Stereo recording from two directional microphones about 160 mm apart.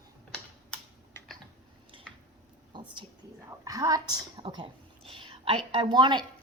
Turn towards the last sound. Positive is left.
turn(degrees=-30)  # may be behind; listen again after turning